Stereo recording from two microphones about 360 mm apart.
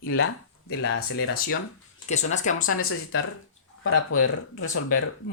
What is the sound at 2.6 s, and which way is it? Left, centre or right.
Speech, left.